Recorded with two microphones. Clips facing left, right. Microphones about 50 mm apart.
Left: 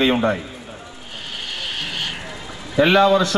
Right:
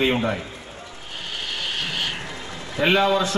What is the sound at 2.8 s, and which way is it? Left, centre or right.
Speech, left.